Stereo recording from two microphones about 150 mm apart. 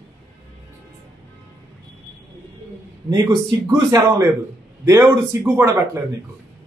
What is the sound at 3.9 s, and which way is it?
A man's voice, 25° right (ahead or behind).